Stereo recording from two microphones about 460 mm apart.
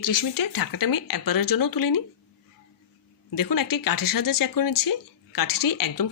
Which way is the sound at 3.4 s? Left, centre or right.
Left.